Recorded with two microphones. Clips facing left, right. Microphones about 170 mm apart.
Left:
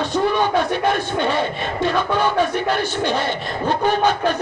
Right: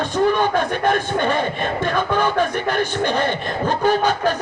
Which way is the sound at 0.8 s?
50° right (ahead or behind).